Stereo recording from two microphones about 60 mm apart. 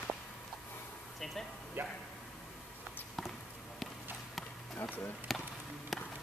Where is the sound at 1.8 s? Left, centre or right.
Right.